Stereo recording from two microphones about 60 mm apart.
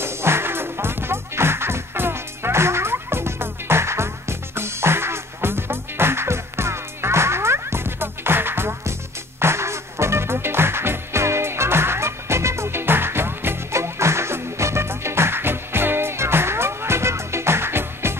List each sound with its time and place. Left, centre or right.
0.0 s music: right
13.7 s music: right